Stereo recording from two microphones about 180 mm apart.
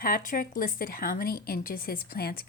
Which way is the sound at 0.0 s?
50° left (ahead or behind).